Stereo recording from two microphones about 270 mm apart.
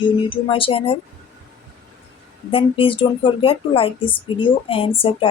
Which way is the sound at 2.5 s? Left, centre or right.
Centre.